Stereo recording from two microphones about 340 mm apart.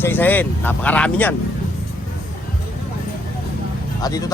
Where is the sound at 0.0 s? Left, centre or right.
Centre.